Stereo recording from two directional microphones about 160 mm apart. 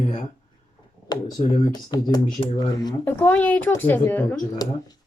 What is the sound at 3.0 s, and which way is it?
Speech, 15° left (ahead or behind).